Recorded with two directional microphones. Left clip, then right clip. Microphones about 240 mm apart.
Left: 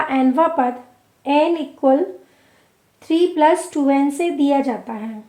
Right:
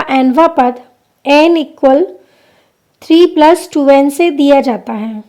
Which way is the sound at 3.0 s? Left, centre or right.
Right.